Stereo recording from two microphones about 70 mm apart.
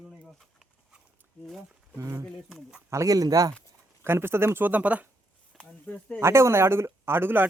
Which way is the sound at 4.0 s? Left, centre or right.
Right.